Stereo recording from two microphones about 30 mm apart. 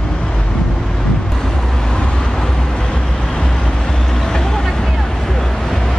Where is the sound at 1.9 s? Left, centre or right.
Left.